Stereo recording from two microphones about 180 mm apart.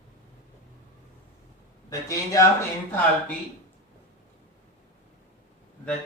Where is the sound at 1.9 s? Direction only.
15° left (ahead or behind).